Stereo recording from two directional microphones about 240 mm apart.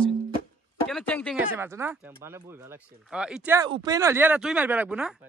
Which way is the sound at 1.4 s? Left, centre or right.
Centre.